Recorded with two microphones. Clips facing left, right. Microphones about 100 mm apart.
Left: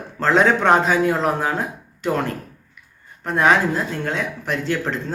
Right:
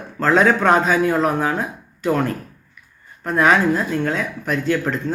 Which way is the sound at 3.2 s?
25° left (ahead or behind).